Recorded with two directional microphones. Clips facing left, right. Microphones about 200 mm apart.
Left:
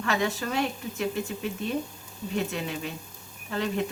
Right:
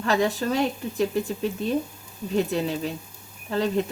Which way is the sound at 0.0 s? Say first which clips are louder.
Right 5 dB; 35° right (ahead or behind).